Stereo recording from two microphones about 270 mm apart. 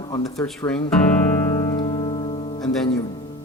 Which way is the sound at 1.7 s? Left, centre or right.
Centre.